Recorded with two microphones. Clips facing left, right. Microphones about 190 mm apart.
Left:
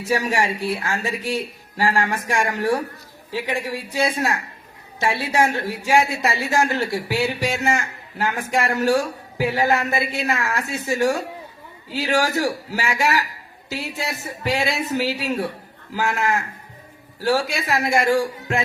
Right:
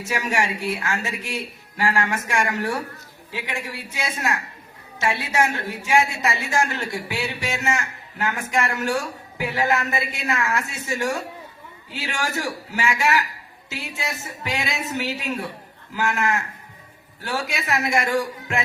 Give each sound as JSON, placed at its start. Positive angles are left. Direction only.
{"t": 0.0, "sound": "a woman's voice", "side_deg": 35}